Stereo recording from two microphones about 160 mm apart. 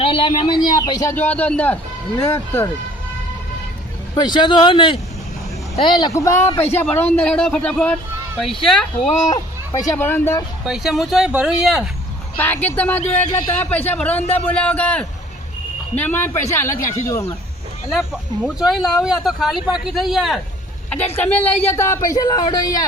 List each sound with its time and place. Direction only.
0.0 s speech: 35° left (ahead or behind)
1.1 s a man's voice: 10° left (ahead or behind)
4.1 s a man's voice: 30° left (ahead or behind); by 8.9 s 5° left (ahead or behind)
9.3 s a man's voice: 20° left (ahead or behind)
10.7 s speech: centre (ahead or behind)
12.4 s a man's voice: 10° left (ahead or behind)
17.8 s speech: 5° right (ahead or behind)
21.2 s speech: 10° left (ahead or behind)